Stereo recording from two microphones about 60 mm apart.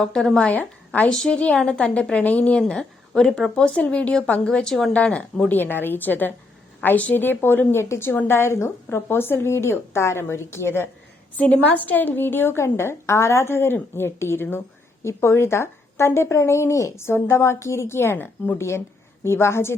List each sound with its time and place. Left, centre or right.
0.0 s a woman's voice: centre; by 2.6 s left
2.6 s a woman's voice: centre
5.5 s a woman's voice: left
11.3 s a woman's voice: left